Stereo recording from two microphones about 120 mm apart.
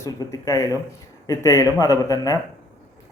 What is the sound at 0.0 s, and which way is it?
A man's voice, 25° left (ahead or behind).